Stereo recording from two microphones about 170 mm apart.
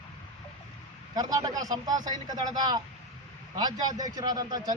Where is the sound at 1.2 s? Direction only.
20° right (ahead or behind).